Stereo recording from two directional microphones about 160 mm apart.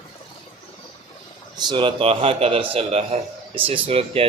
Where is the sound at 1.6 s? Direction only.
30° right (ahead or behind).